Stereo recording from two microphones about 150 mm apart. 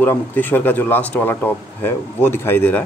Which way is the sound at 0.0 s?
10° left (ahead or behind).